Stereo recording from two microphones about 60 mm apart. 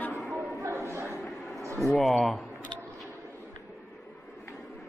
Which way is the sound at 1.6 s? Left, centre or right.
Right.